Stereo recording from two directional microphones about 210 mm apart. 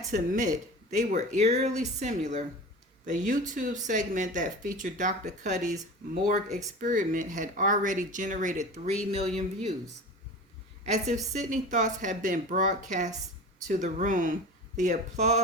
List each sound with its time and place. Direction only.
0.1 s speech: 40° right (ahead or behind)
10.8 s speech: 30° right (ahead or behind)